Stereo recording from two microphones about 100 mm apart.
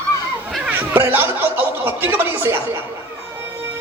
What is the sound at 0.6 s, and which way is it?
Speech, 20° right (ahead or behind).